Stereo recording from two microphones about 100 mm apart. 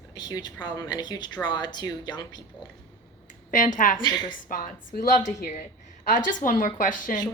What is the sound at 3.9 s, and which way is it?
Speech, 45° left (ahead or behind).